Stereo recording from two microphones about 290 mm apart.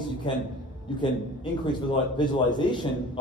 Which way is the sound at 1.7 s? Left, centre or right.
Centre.